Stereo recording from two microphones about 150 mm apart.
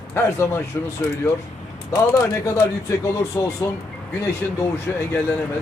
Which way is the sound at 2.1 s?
20° left (ahead or behind).